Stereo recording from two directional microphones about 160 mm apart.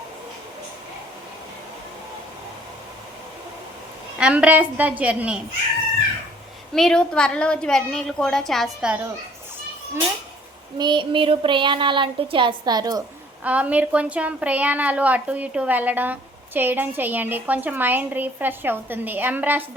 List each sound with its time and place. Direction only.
4.2 s a woman's voice: 5° right (ahead or behind)
6.7 s a woman's voice: 5° left (ahead or behind)
10.8 s speech: 30° right (ahead or behind)
13.4 s a woman's voice: 10° right (ahead or behind)